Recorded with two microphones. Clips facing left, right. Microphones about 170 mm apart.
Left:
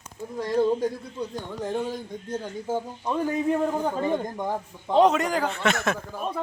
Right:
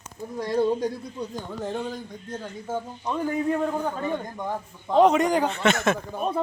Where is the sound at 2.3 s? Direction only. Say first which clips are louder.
Left 3 dB; 5° left (ahead or behind).